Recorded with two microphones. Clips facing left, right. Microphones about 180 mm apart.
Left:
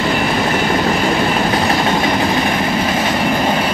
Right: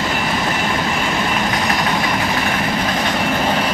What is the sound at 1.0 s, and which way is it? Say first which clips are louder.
Train: left 5 dB; 30° left (ahead or behind).